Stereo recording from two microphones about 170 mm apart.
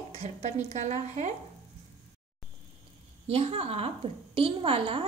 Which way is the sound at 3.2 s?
35° right (ahead or behind).